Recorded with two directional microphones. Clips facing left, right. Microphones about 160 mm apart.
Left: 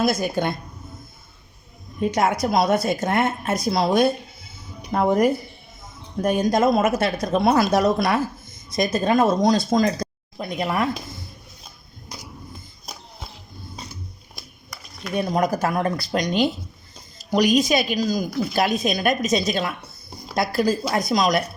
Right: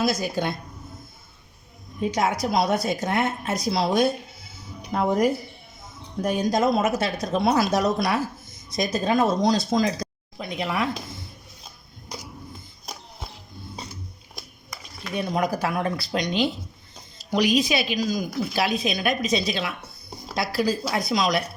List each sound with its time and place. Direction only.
0.0 s speech: 55° left (ahead or behind)
2.0 s a woman's voice: 55° left (ahead or behind)
15.1 s speech: 45° left (ahead or behind)